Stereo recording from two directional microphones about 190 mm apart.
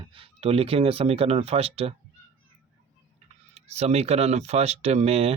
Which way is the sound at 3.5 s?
35° right (ahead or behind).